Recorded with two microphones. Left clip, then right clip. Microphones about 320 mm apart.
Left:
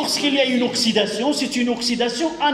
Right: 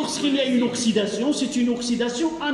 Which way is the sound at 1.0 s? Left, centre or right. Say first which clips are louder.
Left 3 dB; left.